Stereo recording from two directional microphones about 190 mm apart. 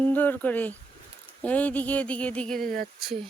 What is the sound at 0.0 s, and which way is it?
Speech, 10° left (ahead or behind).